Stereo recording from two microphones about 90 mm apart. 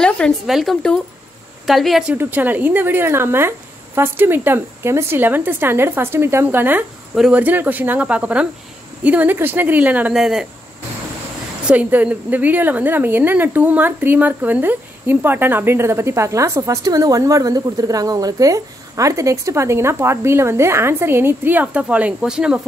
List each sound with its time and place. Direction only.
0.5 s a woman's voice: 5° right (ahead or behind)
2.1 s a woman's voice: 20° right (ahead or behind)
10.1 s a woman's voice: 5° right (ahead or behind)
11.6 s a woman's voice: 15° right (ahead or behind)